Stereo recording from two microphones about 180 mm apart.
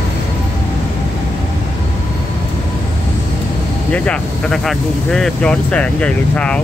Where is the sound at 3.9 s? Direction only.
5° left (ahead or behind).